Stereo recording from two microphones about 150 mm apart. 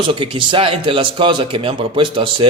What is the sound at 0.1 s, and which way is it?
A man's voice, 35° right (ahead or behind).